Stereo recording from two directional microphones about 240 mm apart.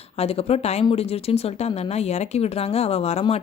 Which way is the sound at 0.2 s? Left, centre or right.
Left.